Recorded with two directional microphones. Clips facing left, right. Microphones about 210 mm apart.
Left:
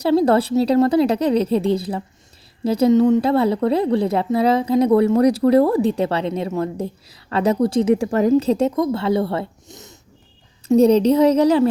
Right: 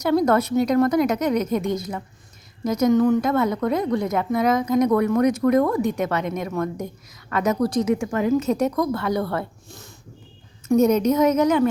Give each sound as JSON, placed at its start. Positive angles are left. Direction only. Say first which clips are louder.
{"t": 0.0, "sound": "a woman's voice", "louder": "left 3 dB", "side_deg": 30}